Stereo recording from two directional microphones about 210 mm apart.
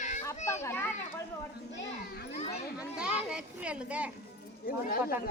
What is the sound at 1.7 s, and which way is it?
Children playing, 50° left (ahead or behind).